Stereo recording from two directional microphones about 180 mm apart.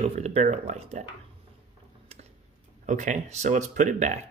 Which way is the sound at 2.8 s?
45° right (ahead or behind).